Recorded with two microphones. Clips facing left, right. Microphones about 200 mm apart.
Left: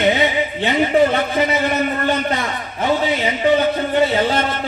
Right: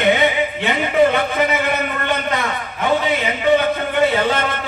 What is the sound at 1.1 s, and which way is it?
A man's voice, 35° left (ahead or behind).